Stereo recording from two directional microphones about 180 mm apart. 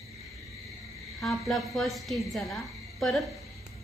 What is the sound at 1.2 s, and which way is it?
A woman's voice, centre (ahead or behind).